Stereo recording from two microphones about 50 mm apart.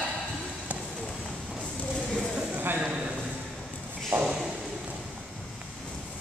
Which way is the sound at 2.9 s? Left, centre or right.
Centre.